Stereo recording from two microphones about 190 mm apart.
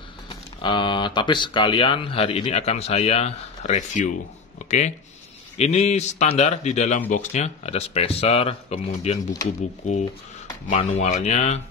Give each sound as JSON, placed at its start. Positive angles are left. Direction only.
{"t": 0.3, "sound": "speech", "side_deg": 25}
{"t": 10.8, "sound": "speech", "side_deg": 35}